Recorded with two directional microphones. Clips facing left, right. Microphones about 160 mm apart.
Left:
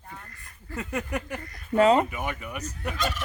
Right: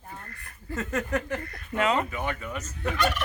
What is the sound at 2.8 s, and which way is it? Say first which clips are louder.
Turkey: right 4 dB; 65° right (ahead or behind).